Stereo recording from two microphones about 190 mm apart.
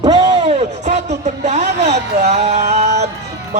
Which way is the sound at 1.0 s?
35° right (ahead or behind).